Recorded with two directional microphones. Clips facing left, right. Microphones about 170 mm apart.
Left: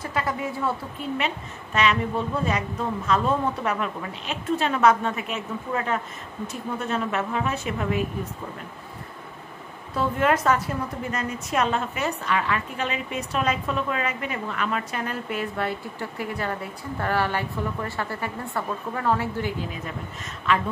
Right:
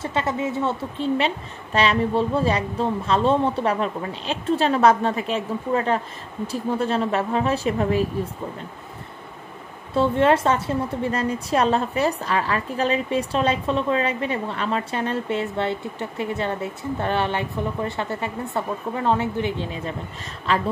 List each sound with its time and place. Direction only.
0.0 s a woman's voice: 25° right (ahead or behind)
9.9 s a woman's voice: 30° right (ahead or behind)